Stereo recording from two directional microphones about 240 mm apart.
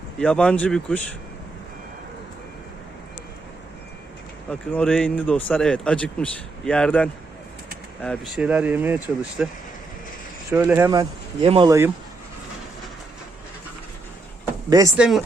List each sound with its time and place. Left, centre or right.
0.2 s speech: centre
4.4 s speech: centre
14.7 s speech: centre